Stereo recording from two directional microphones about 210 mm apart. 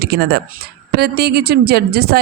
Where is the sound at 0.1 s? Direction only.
50° right (ahead or behind).